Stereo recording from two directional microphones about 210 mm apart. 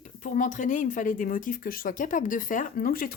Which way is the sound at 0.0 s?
40° left (ahead or behind).